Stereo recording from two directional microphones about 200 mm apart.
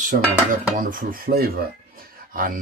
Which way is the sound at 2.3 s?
45° right (ahead or behind).